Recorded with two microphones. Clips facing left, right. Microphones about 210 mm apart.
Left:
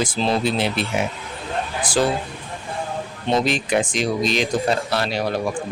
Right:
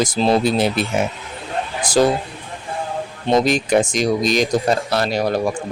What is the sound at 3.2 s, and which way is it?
Speech, 40° right (ahead or behind).